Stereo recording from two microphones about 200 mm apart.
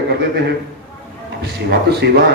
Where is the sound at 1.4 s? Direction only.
55° right (ahead or behind).